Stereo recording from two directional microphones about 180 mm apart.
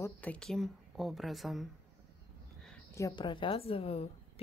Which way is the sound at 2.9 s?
15° left (ahead or behind).